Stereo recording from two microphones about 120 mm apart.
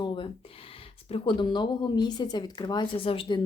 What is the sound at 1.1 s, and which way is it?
Speech, 45° left (ahead or behind).